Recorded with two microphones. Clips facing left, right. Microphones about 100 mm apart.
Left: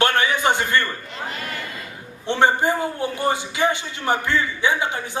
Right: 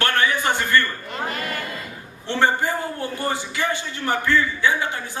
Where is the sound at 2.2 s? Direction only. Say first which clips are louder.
Left 2 dB; 20° left (ahead or behind).